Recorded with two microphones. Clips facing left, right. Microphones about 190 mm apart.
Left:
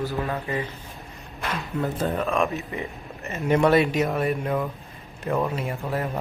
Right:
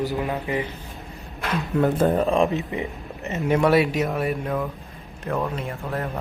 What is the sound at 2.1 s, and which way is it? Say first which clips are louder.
Speech: right 4 dB; 35° right (ahead or behind).